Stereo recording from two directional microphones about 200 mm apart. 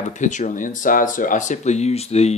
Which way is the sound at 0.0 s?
35° left (ahead or behind).